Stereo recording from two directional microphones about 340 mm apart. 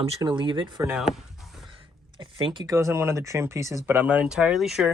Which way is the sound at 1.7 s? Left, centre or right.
Centre.